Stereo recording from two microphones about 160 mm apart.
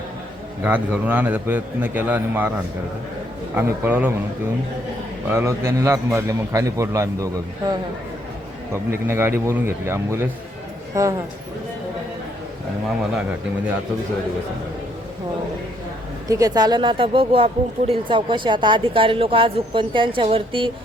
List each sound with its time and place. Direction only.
0.6 s a man's voice: 10° right (ahead or behind)
3.5 s a man's voice: 15° right (ahead or behind)
5.3 s a man's voice: 15° right (ahead or behind)
8.7 s a man's voice: 15° right (ahead or behind)
16.3 s a woman's voice: 20° right (ahead or behind)